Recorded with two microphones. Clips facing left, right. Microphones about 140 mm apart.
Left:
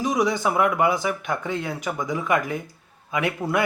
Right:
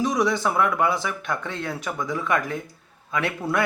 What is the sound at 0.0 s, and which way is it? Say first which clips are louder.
A man's voice: even; centre (ahead or behind).